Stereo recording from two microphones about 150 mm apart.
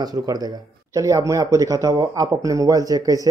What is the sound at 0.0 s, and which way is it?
Speech, 25° right (ahead or behind).